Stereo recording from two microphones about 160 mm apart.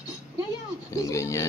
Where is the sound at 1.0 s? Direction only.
20° left (ahead or behind).